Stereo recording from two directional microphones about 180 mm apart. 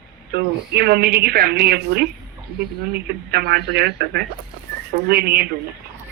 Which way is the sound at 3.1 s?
60° right (ahead or behind).